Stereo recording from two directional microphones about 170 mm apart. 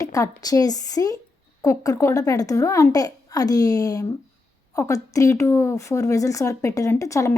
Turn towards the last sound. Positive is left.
turn(degrees=20)  # may be behind; listen again after turning